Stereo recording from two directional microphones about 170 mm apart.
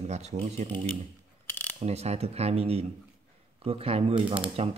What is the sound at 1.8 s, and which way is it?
Speech, 40° right (ahead or behind).